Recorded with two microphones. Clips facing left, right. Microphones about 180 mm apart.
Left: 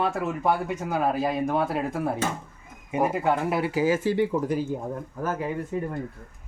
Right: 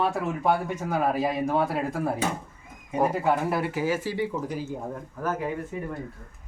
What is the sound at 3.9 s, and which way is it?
Speech, 55° left (ahead or behind).